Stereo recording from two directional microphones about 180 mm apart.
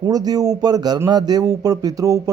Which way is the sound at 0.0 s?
20° right (ahead or behind).